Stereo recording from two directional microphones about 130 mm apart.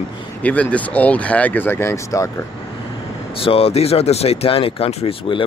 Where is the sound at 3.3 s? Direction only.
45° left (ahead or behind).